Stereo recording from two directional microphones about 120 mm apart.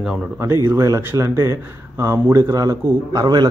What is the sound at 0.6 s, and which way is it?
Speech, 30° right (ahead or behind).